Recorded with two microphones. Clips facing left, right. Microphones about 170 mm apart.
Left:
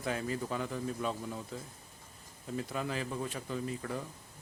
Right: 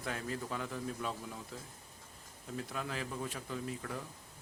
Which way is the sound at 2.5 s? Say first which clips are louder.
Left 4 dB; centre (ahead or behind).